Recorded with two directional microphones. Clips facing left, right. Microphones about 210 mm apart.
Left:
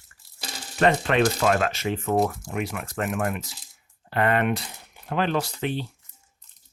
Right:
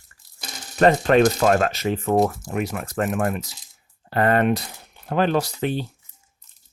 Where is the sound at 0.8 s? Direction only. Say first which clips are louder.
Right 5 dB; 40° right (ahead or behind).